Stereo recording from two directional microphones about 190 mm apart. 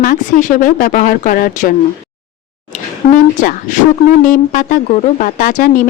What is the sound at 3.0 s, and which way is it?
Speech, 45° left (ahead or behind).